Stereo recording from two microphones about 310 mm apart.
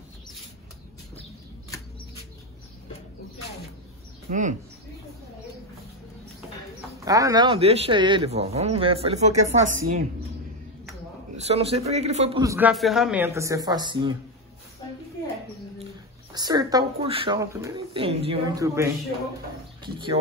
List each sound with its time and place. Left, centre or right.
4.3 s speech: right
7.1 s speech: centre
11.3 s speech: centre
12.4 s speech: centre
16.3 s speech: centre